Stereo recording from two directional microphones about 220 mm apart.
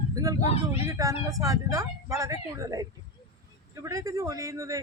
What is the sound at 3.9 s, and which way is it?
Speech, 15° right (ahead or behind).